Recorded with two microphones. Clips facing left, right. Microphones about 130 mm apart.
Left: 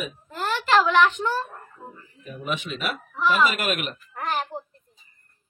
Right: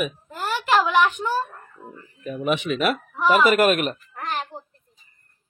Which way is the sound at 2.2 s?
65° right (ahead or behind).